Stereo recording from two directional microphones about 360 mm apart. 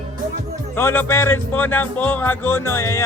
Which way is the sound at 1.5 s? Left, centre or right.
Centre.